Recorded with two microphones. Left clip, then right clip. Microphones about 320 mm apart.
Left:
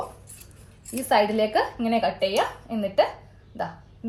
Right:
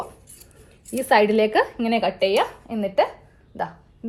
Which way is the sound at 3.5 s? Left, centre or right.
Right.